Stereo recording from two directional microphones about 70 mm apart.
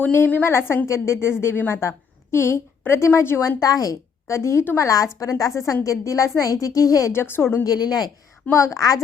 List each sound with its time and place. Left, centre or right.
0.0 s a woman's voice: left
3.6 s a woman's voice: left
4.3 s a woman's voice: left
5.2 s a woman's voice: left
7.1 s speech: left
7.6 s a woman's voice: left
8.5 s a woman's voice: left